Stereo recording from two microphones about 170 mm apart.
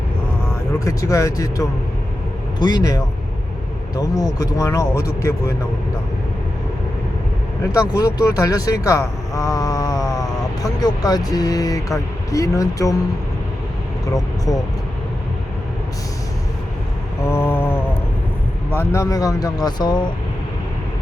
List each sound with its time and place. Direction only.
0.7 s speech: 20° left (ahead or behind)
7.6 s speech: 20° left (ahead or behind)
14.1 s speech: 20° left (ahead or behind)
17.2 s mantra: 15° left (ahead or behind)
18.8 s speech: 15° left (ahead or behind)